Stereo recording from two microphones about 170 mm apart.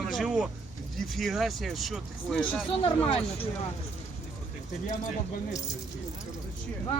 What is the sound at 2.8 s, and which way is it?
Speech, 35° left (ahead or behind).